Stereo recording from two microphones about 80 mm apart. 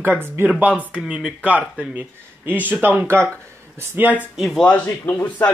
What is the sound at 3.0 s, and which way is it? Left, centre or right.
Speech, right.